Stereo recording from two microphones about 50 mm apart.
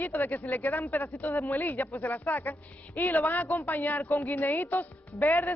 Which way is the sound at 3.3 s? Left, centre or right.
Left.